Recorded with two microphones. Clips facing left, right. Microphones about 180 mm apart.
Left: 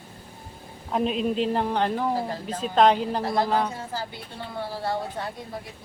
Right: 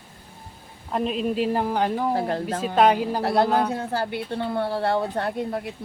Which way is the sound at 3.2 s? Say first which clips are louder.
Right 3 dB; 65° right (ahead or behind).